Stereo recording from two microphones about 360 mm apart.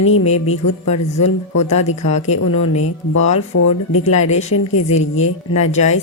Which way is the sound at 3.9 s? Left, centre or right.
Centre.